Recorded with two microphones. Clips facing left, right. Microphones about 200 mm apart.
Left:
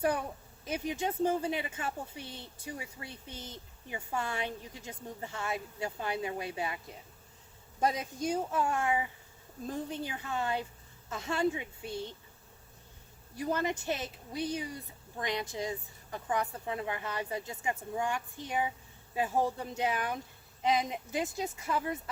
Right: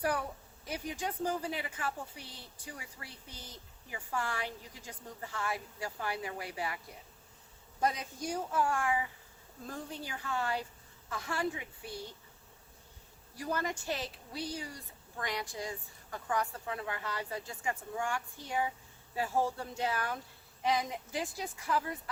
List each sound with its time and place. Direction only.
0.0 s a woman's voice: 20° left (ahead or behind)
13.3 s a woman's voice: 20° left (ahead or behind)